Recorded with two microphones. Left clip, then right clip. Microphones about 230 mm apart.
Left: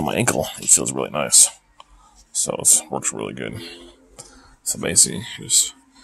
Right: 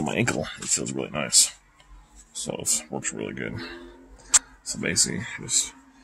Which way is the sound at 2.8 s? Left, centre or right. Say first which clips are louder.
Left 5 dB; centre.